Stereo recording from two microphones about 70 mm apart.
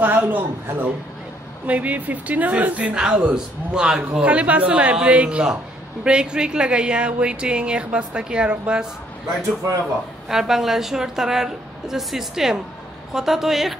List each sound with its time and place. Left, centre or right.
0.0 s speech: right
10.2 s a woman's voice: centre